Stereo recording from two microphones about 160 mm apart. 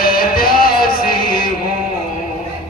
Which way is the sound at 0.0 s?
65° left (ahead or behind).